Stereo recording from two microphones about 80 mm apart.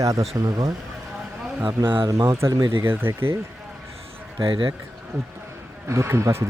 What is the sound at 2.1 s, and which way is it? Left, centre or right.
Speech, right.